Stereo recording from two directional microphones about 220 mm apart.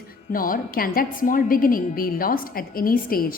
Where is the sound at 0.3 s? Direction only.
40° left (ahead or behind).